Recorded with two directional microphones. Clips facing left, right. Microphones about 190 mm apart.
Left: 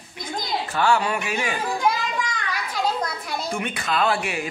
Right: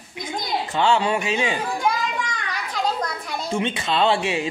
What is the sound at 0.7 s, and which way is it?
Speech, 25° right (ahead or behind).